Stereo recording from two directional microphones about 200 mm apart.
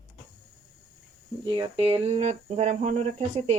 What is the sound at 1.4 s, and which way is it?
Speech, 25° right (ahead or behind).